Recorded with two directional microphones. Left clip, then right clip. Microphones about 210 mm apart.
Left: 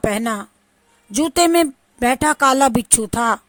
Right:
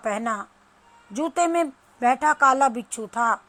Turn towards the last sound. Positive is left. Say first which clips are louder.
# left 5 dB
turn(degrees=50)  # may be behind; listen again after turning